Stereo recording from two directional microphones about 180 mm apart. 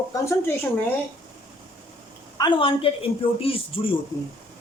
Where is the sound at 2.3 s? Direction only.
25° left (ahead or behind).